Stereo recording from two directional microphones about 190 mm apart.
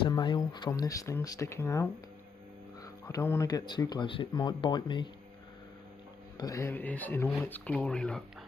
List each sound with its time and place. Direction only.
0.0 s speech: 25° left (ahead or behind)
6.3 s speech: 20° left (ahead or behind)